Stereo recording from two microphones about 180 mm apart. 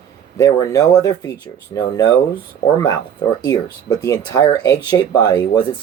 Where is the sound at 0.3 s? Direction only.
20° left (ahead or behind).